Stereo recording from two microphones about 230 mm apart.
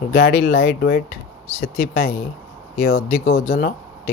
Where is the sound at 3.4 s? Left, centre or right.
Left.